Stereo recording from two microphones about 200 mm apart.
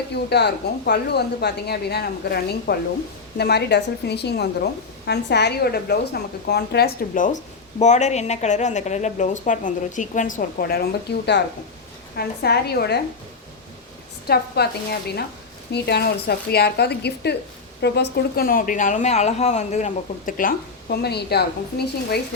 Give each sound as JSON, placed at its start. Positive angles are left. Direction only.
{"t": 0.1, "sound": "a woman's voice", "side_deg": 55}
{"t": 14.3, "sound": "speech", "side_deg": 50}
{"t": 15.7, "sound": "a woman's voice", "side_deg": 55}